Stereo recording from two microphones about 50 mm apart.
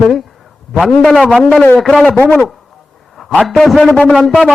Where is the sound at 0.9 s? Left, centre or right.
Centre.